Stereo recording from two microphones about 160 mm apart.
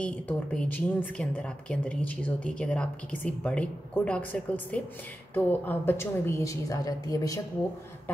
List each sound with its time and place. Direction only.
0.0 s speech: 5° left (ahead or behind); by 7.3 s 20° left (ahead or behind)